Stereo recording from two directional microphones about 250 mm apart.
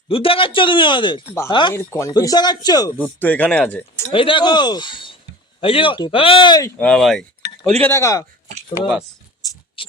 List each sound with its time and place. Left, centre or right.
0.1 s speech: left; by 4.0 s centre
4.1 s speech: left
6.7 s speech: centre
9.4 s a sound: centre